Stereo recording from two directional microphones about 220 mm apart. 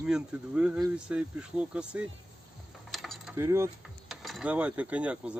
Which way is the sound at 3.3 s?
10° right (ahead or behind).